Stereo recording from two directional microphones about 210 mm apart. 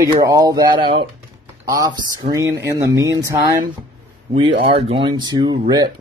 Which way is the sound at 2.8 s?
55° right (ahead or behind).